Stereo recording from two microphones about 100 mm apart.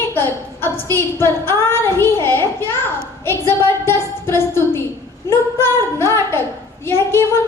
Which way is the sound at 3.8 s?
25° left (ahead or behind).